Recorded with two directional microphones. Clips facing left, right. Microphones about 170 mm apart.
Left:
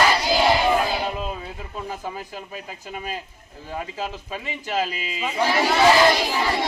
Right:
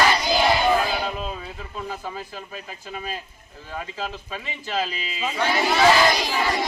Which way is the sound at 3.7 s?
15° left (ahead or behind).